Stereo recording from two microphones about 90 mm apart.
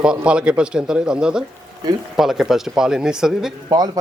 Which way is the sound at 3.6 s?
50° right (ahead or behind).